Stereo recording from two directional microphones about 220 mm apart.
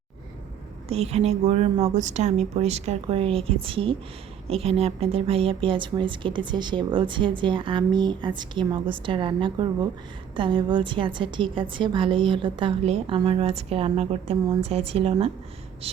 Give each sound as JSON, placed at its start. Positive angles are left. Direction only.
{"t": 0.9, "sound": "speech", "side_deg": -30}